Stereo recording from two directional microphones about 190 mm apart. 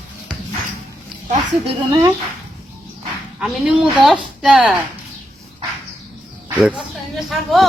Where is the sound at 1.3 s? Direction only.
30° right (ahead or behind).